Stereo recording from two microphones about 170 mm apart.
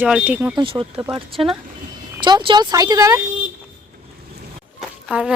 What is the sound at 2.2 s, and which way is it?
Speech, 30° right (ahead or behind).